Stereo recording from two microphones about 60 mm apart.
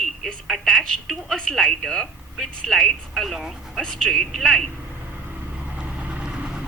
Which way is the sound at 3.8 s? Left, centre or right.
Centre.